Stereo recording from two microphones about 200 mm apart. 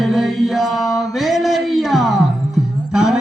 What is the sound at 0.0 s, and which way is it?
Chant, centre (ahead or behind).